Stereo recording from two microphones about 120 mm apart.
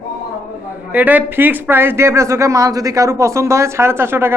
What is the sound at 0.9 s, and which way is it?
Speech, 15° right (ahead or behind).